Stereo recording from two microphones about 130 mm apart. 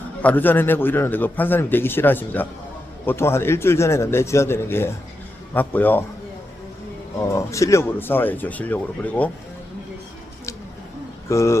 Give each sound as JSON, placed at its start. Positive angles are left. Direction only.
{"t": 0.2, "sound": "a man's voice", "side_deg": 15}
{"t": 7.2, "sound": "a man's voice", "side_deg": 25}
{"t": 11.3, "sound": "speech", "side_deg": 20}